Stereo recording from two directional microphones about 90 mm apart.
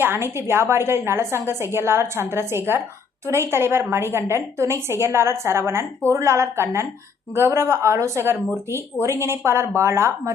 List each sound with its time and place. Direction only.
0.0 s a woman's voice: 25° right (ahead or behind)